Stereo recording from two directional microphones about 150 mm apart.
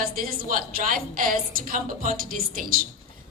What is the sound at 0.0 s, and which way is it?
A woman's voice, 75° right (ahead or behind).